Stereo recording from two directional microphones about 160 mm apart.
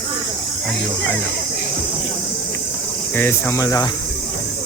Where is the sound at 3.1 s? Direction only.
10° left (ahead or behind).